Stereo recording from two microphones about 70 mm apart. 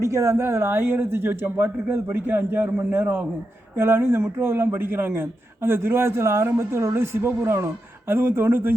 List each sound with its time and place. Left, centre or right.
0.0 s speech: right